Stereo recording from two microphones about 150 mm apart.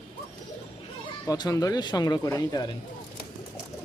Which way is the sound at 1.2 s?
25° left (ahead or behind).